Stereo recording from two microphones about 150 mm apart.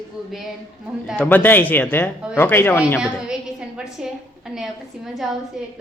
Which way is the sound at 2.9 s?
5° right (ahead or behind).